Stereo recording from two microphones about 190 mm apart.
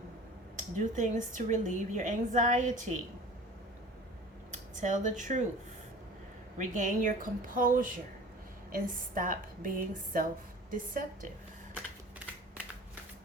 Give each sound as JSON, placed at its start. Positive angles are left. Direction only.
{"t": 0.5, "sound": "a woman's voice", "side_deg": -40}
{"t": 4.7, "sound": "a woman's voice", "side_deg": -40}
{"t": 6.6, "sound": "a woman's voice", "side_deg": -40}